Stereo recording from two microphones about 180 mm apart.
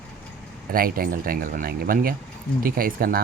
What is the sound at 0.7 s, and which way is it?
Speech, 55° right (ahead or behind).